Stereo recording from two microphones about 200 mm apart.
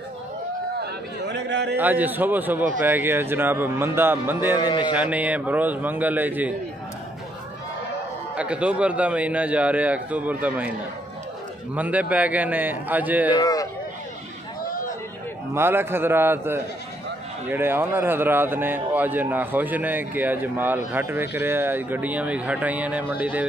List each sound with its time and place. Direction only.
1.3 s speech: 60° right (ahead or behind)
1.8 s speech: 10° right (ahead or behind)
4.6 s speech: 20° left (ahead or behind)
4.9 s speech: 5° right (ahead or behind)
8.4 s speech: 5° right (ahead or behind)
11.7 s speech: 5° right (ahead or behind)
13.3 s speech: 20° left (ahead or behind)
15.5 s speech: 10° right (ahead or behind)